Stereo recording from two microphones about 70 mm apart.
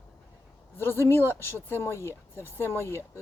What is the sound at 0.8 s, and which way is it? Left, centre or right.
Speech, left.